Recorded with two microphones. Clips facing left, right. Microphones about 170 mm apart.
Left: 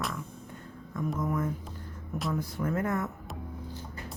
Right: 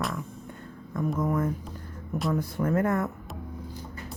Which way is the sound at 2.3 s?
55° right (ahead or behind).